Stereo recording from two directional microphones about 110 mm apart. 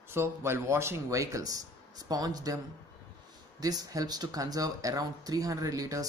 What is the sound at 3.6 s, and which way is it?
Speech, 35° right (ahead or behind).